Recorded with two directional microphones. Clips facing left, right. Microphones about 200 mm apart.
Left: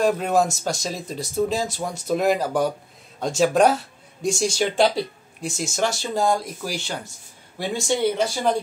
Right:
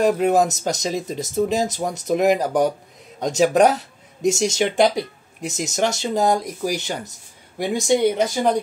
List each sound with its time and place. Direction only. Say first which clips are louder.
0.0 s speech: right 3 dB; 20° right (ahead or behind)